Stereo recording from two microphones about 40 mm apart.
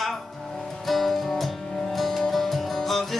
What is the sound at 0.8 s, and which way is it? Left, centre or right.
Music, centre.